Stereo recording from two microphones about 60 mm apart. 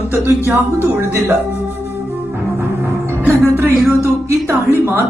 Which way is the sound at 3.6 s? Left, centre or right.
Right.